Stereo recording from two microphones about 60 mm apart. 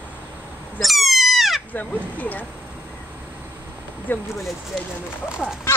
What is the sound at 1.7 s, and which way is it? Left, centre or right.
Speech, left.